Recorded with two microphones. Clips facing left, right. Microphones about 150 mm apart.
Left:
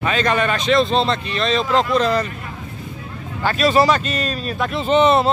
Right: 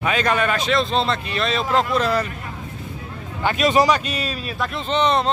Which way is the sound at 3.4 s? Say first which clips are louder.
Left 1 dB; 15° right (ahead or behind).